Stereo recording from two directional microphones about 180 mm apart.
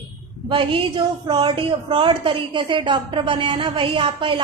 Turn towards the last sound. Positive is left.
turn(degrees=-30)  # may be behind; listen again after turning